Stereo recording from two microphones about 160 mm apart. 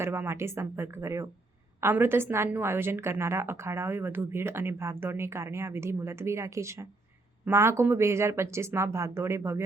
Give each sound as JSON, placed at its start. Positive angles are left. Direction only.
{"t": 0.0, "sound": "a woman's voice", "side_deg": -15}